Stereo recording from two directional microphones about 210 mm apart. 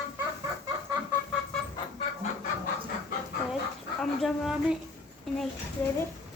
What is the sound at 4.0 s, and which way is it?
Speech, centre (ahead or behind).